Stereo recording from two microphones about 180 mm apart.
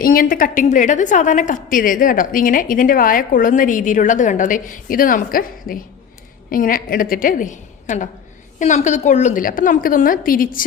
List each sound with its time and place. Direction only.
0.0 s a woman's voice: 50° left (ahead or behind)